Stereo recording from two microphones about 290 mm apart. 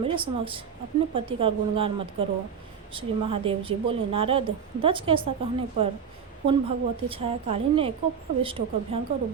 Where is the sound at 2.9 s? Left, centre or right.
Centre.